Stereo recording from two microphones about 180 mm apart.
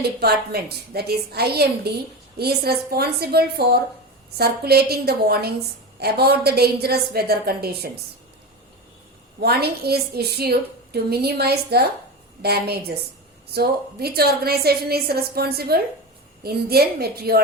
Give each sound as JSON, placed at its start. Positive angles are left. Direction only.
{"t": 0.2, "sound": "a woman's voice", "side_deg": -60}
{"t": 9.4, "sound": "a woman's voice", "side_deg": -60}